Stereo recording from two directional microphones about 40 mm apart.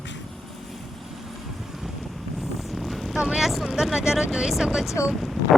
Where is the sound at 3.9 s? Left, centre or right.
Centre.